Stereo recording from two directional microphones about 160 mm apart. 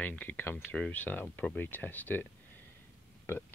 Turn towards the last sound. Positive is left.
turn(degrees=10)  # may be behind; listen again after turning